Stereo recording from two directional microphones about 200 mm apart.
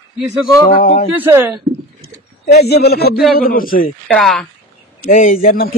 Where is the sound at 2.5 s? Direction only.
55° left (ahead or behind).